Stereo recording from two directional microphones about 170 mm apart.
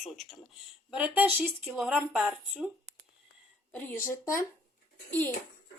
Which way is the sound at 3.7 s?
15° left (ahead or behind).